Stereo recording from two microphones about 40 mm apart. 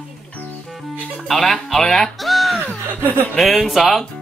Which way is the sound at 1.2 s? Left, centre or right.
Centre.